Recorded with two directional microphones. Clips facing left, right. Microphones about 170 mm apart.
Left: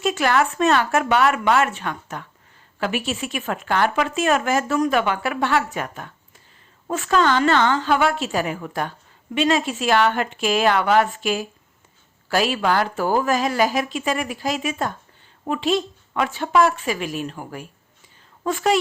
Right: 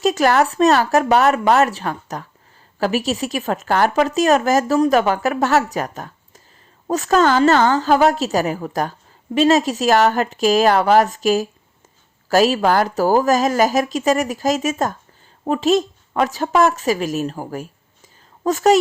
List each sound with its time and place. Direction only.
0.0 s a woman's voice: 40° right (ahead or behind)